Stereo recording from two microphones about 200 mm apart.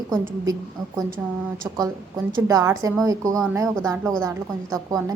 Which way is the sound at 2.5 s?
15° right (ahead or behind).